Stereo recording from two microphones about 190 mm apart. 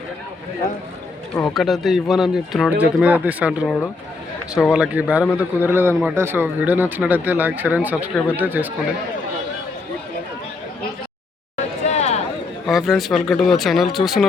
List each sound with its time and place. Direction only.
1.5 s speech: centre (ahead or behind)
11.9 s a sound: 35° left (ahead or behind)
12.6 s speech: centre (ahead or behind)